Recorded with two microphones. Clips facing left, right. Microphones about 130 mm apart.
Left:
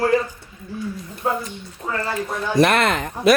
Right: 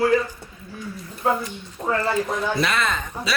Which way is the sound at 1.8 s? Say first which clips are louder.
Right 4 dB; 30° right (ahead or behind).